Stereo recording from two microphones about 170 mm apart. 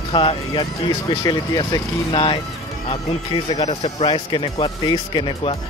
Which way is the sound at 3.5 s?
30° left (ahead or behind).